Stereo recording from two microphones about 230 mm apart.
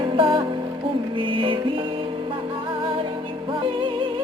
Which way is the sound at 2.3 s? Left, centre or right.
Right.